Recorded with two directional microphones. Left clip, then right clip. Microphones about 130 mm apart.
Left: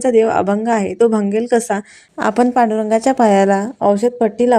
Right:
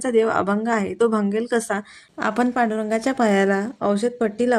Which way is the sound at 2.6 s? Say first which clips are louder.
Left 7 dB; 15° left (ahead or behind).